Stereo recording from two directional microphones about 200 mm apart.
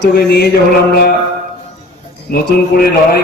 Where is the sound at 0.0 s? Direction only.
50° left (ahead or behind).